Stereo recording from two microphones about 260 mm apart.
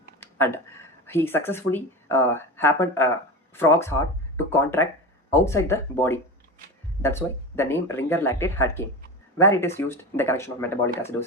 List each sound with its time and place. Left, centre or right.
0.2 s speech: centre